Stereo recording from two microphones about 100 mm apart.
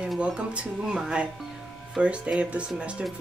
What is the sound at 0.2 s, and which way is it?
Speech, 10° right (ahead or behind).